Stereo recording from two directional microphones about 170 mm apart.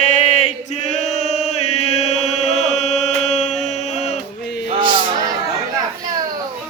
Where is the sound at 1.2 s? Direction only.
40° left (ahead or behind).